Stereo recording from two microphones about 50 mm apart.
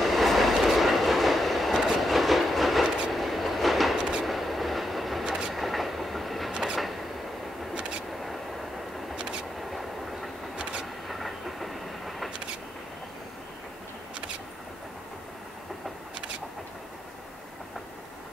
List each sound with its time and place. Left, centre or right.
0.0 s train: centre
6.5 s vehicle: centre
9.1 s vehicle: centre
9.6 s train: centre
10.6 s vehicle: centre
11.1 s train: centre